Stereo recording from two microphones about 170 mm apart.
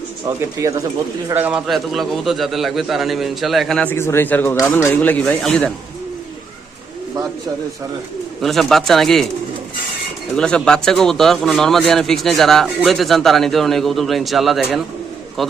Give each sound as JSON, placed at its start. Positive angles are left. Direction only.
{"t": 0.6, "sound": "speech", "side_deg": -20}
{"t": 1.3, "sound": "speech", "side_deg": -10}
{"t": 8.4, "sound": "speech", "side_deg": 0}
{"t": 10.3, "sound": "speech", "side_deg": 5}